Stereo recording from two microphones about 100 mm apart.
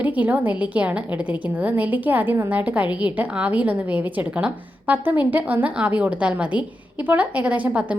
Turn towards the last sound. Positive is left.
turn(degrees=-15)  # may be behind; listen again after turning